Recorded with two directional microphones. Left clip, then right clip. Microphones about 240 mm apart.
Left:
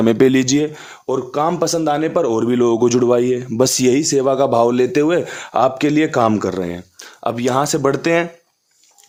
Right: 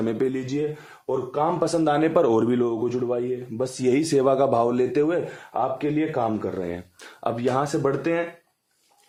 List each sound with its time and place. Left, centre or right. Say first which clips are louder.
0.0 s speech: left 12 dB; left; by 2.5 s centre
2.5 s speech: left 8 dB; left
2.8 s speech: left 11 dB; left
3.8 s speech: left 1 dB; centre; by 6.7 s left
6.7 s speech: left 4 dB; left